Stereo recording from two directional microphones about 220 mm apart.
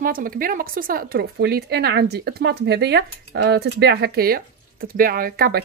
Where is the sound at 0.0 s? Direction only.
40° right (ahead or behind).